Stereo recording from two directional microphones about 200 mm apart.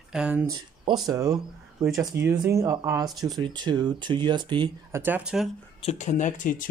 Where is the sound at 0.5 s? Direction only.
20° right (ahead or behind).